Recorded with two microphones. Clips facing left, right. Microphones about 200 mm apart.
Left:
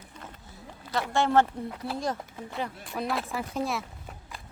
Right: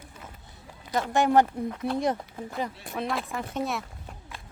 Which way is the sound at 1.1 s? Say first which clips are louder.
Right 2 dB; 15° right (ahead or behind).